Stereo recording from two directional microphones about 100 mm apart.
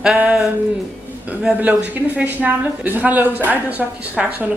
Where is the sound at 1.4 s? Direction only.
15° right (ahead or behind).